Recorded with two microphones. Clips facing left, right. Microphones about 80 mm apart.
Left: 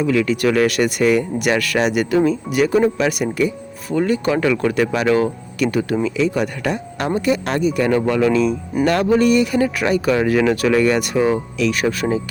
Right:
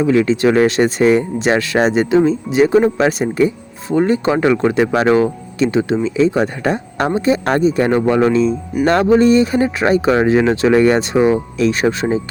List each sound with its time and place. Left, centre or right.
0.0 s speech: right